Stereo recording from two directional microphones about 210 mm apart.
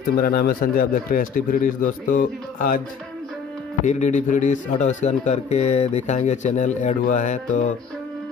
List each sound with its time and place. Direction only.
0.2 s a man's voice: 45° left (ahead or behind)
3.8 s a man's voice: 35° left (ahead or behind)